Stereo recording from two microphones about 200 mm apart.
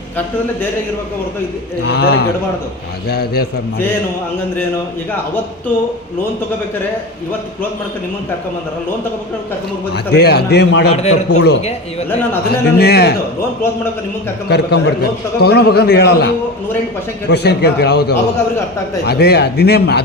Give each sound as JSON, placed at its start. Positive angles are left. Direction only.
{"t": 1.8, "sound": "a man's voice", "side_deg": 55}
{"t": 9.9, "sound": "a man's voice", "side_deg": 55}
{"t": 14.5, "sound": "a man's voice", "side_deg": 55}